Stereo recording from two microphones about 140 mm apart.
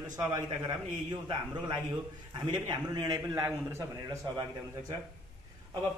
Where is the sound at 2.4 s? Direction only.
30° right (ahead or behind).